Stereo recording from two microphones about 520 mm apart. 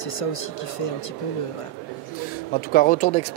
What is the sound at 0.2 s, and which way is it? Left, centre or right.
Speech, left.